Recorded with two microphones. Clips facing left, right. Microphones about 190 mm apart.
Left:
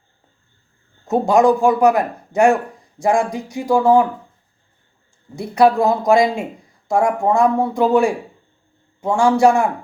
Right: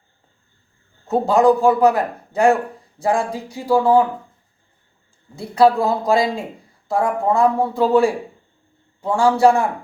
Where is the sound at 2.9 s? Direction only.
15° left (ahead or behind).